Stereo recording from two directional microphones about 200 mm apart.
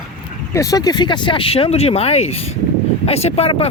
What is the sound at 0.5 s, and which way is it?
Speech, 15° left (ahead or behind).